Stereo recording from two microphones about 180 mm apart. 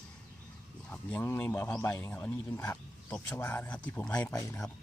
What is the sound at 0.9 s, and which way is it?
Speech, 10° left (ahead or behind).